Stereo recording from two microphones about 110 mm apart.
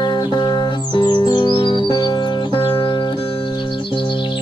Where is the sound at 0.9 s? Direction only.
45° left (ahead or behind).